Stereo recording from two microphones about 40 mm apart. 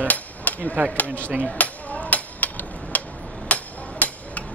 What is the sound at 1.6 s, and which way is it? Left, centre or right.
Hammer, left.